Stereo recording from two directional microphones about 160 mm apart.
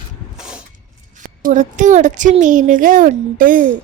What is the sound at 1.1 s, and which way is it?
A woman's voice, 55° right (ahead or behind).